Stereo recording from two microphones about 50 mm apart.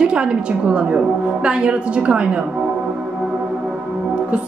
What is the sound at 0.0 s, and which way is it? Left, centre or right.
A woman's voice, centre.